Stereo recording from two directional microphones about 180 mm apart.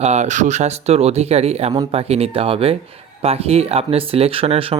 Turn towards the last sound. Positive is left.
turn(degrees=-30)  # may be behind; listen again after turning